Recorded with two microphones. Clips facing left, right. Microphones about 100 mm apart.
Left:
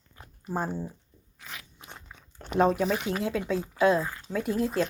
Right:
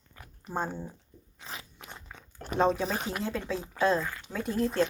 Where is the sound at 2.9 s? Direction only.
35° right (ahead or behind).